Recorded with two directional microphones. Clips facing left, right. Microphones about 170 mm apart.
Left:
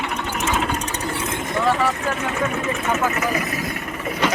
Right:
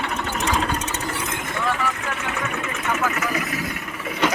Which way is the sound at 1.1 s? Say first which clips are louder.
Left 4 dB; 30° left (ahead or behind).